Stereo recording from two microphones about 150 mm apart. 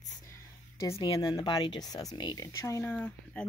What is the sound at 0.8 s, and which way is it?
Speech, 25° left (ahead or behind).